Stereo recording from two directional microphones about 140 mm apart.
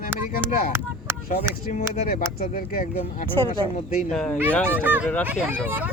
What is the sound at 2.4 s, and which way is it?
Speech, 80° left.